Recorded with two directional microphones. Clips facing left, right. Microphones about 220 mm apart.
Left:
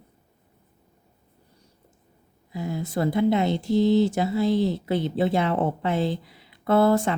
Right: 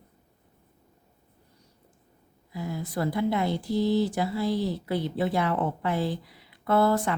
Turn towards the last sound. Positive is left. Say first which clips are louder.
# left 4 dB
turn(degrees=25)  # may be behind; listen again after turning